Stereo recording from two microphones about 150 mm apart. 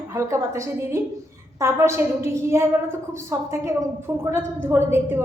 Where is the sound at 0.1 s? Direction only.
20° right (ahead or behind).